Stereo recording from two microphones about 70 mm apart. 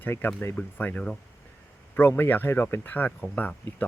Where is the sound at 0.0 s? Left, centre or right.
Left.